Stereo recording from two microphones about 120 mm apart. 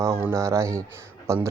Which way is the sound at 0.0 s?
20° right (ahead or behind).